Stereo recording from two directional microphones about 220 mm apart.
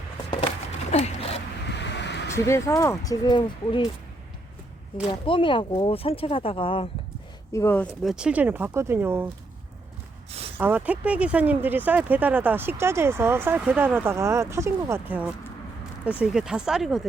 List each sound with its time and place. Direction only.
0.9 s a sound: 30° left (ahead or behind)
1.7 s vehicle: 50° left (ahead or behind)
2.3 s speech: 10° left (ahead or behind)
5.2 s speech: 20° left (ahead or behind)
7.5 s speech: 10° left (ahead or behind); by 9.3 s 10° right (ahead or behind)
10.6 s speech: 5° right (ahead or behind)